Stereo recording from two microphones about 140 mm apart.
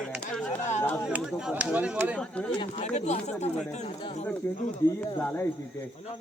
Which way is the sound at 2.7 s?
55° left (ahead or behind).